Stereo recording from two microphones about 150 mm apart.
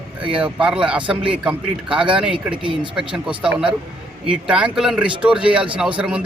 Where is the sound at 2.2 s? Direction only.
5° right (ahead or behind).